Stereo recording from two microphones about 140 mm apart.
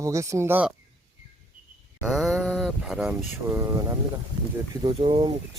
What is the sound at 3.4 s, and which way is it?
Speech, 15° right (ahead or behind).